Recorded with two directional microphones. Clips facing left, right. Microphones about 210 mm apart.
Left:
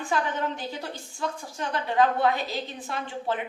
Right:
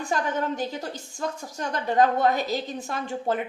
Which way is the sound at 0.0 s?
40° right (ahead or behind).